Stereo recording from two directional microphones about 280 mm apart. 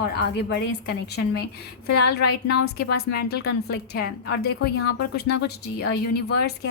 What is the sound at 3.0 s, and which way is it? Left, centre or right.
Speech, left.